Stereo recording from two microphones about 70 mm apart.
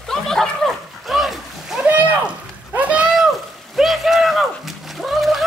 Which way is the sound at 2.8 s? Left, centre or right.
Centre.